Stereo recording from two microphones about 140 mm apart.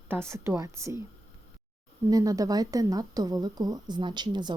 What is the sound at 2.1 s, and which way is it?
A woman's voice, 25° right (ahead or behind).